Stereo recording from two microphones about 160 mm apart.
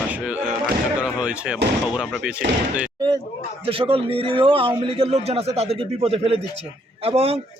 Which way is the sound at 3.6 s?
35° right (ahead or behind).